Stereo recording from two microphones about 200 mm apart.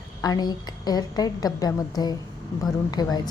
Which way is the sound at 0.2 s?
20° left (ahead or behind).